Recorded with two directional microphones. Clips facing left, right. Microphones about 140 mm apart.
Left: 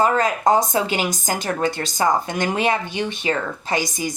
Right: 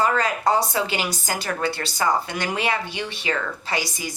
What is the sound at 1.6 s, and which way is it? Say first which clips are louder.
Speech: left 3 dB; 45° left (ahead or behind).